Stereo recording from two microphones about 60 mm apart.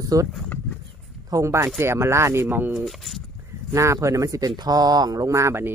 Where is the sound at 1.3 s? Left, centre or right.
Right.